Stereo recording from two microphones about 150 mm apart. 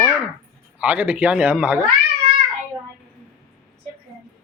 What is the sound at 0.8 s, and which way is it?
Speech, 10° right (ahead or behind).